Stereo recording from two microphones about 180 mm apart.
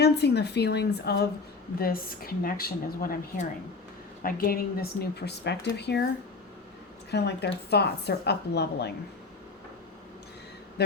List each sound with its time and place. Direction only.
0.0 s a woman's voice: 65° left (ahead or behind)
1.8 s speech: 55° left (ahead or behind)
7.1 s speech: 65° left (ahead or behind)
10.8 s speech: 65° left (ahead or behind)